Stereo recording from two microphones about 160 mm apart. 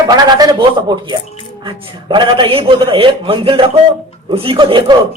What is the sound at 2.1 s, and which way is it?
A man's voice, 30° right (ahead or behind).